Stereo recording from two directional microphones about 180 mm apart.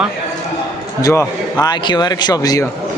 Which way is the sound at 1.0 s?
20° left (ahead or behind).